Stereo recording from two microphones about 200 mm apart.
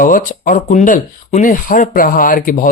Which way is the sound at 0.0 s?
45° left (ahead or behind).